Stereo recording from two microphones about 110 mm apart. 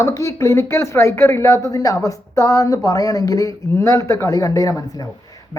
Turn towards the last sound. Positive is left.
turn(degrees=35)  # may be behind; listen again after turning